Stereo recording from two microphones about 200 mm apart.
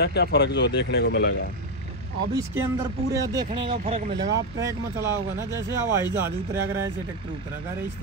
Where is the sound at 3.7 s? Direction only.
35° right (ahead or behind).